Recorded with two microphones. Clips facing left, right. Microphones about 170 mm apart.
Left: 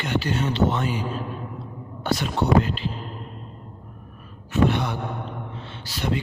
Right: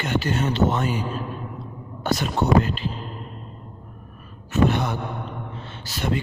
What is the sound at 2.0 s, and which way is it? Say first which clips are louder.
Speech: right 1 dB; 45° right (ahead or behind).